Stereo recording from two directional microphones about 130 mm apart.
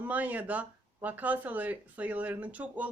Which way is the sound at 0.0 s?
10° right (ahead or behind).